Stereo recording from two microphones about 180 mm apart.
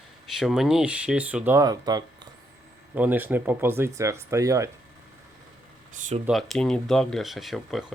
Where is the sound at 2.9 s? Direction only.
10° right (ahead or behind).